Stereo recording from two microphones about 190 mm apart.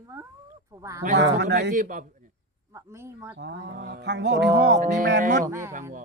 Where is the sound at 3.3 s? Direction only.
60° right (ahead or behind).